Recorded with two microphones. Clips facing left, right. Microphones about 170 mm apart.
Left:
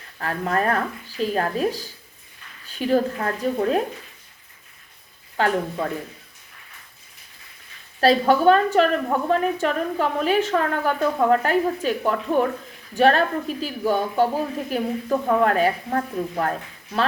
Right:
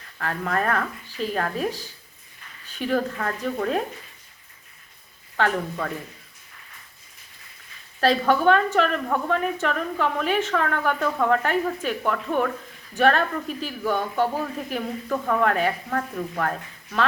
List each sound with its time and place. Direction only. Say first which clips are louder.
0.2 s a woman's voice: left 2 dB; 35° left (ahead or behind)
5.4 s speech: left 2 dB; 30° left (ahead or behind)
8.0 s a woman's voice: left 3 dB; 35° left (ahead or behind)
9.0 s speech: left 2 dB; 25° left (ahead or behind)
9.3 s a woman's voice: left 5 dB; 35° left (ahead or behind)
15.1 s speech: left 3 dB; 25° left (ahead or behind)